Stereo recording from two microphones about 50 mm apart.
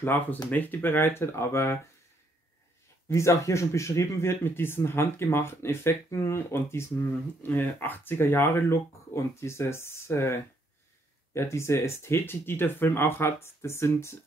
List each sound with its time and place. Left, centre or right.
0.3 s speech: left
0.7 s speech: left
3.1 s speech: left
4.5 s speech: left
6.0 s speech: left
7.4 s speech: left
9.1 s speech: left
11.3 s speech: left